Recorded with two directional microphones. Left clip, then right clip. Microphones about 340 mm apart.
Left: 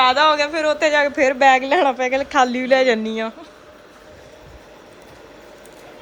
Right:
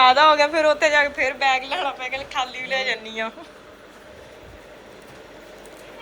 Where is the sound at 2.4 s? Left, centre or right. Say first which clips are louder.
Left 9 dB; left.